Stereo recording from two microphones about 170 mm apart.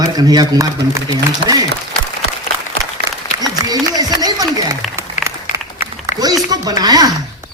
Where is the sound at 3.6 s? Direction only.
20° right (ahead or behind).